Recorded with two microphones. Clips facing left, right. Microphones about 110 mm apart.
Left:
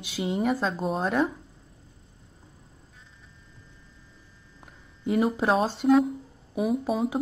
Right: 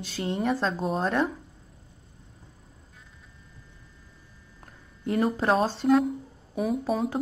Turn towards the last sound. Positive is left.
turn(degrees=5)  # may be behind; listen again after turning